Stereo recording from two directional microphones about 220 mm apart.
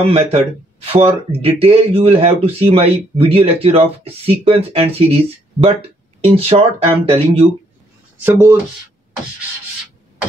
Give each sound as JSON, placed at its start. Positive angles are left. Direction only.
{"t": 0.0, "sound": "speech", "side_deg": -25}
{"t": 8.2, "sound": "speech", "side_deg": -10}